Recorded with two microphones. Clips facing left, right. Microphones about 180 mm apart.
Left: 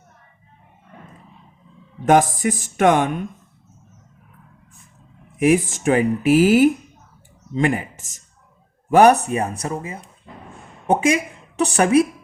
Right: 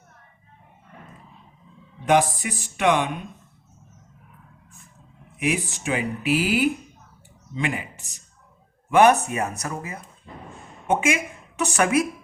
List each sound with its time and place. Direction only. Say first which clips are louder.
2.0 s speech: left 4 dB; 45° left (ahead or behind)
5.4 s speech: left 9 dB; 45° left (ahead or behind)